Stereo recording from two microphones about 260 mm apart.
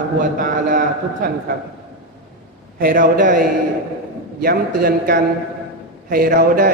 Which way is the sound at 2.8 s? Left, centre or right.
Right.